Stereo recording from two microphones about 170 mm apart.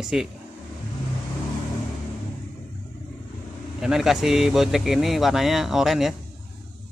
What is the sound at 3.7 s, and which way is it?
Speech, 5° right (ahead or behind).